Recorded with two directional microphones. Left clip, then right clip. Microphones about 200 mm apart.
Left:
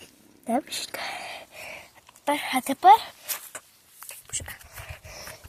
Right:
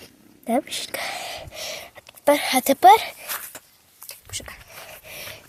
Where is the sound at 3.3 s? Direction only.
5° right (ahead or behind).